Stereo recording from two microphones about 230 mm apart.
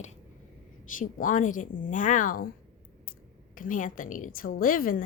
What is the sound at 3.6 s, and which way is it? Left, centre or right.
A woman's voice, left.